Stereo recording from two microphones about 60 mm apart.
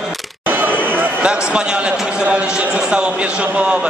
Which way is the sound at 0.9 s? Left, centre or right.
Right.